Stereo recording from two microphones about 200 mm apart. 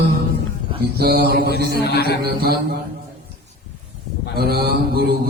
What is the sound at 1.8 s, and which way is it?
Speech, 55° left (ahead or behind).